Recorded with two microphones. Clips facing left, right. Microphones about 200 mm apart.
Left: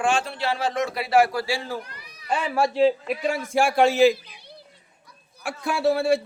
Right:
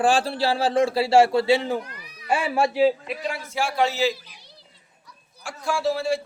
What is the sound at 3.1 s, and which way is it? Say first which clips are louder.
A man's voice: left 5 dB; 50° left (ahead or behind).